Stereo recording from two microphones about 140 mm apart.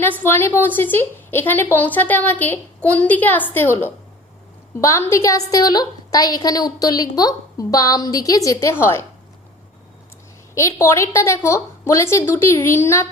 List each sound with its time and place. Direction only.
0.2 s a woman's voice: 15° left (ahead or behind)
10.5 s a woman's voice: 20° left (ahead or behind)